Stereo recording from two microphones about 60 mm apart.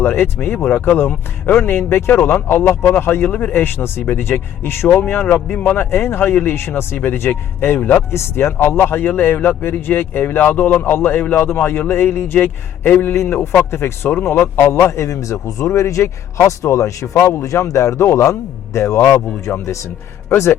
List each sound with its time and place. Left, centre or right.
0.0 s speech: left
3.2 s a man's voice: left
7.8 s a man's voice: left
8.1 s a man's voice: left